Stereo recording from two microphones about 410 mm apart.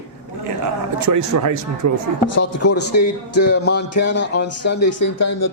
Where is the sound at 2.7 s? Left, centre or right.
Left.